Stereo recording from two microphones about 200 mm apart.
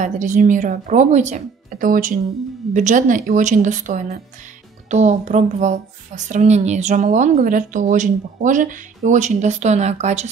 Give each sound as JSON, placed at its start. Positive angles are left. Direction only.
{"t": 0.0, "sound": "speech", "side_deg": -40}